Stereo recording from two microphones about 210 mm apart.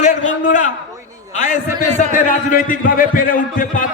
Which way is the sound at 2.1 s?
40° left (ahead or behind).